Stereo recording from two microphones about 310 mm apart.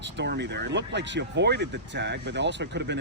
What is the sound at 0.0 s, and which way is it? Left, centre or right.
Speech, right.